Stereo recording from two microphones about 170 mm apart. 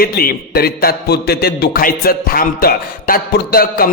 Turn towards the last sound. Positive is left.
turn(degrees=65)  # may be behind; listen again after turning